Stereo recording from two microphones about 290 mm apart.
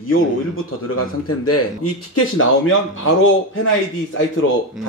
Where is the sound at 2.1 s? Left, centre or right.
Left.